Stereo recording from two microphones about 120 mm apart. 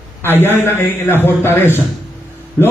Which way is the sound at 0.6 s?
20° left (ahead or behind).